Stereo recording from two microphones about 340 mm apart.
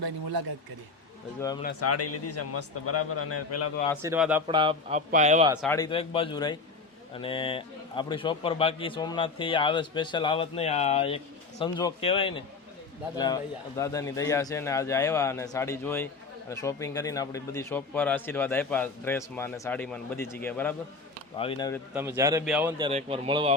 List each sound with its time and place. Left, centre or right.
0.0 s speech: right
1.8 s a man's voice: left
4.0 s a man's voice: centre
5.6 s speech: centre
21.3 s speech: centre
21.9 s a man's voice: centre
22.9 s a man's voice: centre